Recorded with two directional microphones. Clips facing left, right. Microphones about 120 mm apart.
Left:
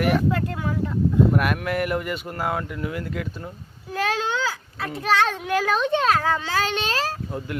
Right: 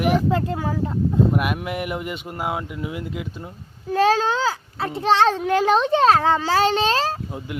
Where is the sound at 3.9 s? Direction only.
30° right (ahead or behind).